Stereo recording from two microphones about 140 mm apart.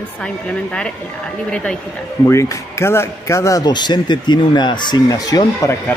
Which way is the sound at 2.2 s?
20° left (ahead or behind).